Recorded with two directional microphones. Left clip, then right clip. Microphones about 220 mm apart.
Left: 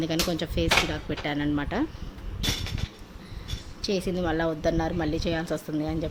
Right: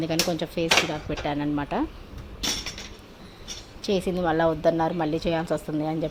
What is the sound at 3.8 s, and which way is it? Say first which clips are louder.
A woman's voice: right 3 dB; centre (ahead or behind).